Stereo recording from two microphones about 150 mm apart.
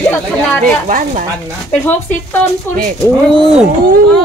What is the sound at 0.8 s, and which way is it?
Speech, 60° right (ahead or behind).